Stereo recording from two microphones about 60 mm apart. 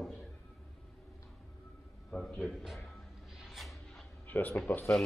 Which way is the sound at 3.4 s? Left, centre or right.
Centre.